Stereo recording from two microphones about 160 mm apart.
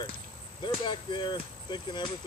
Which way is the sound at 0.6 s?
30° left (ahead or behind).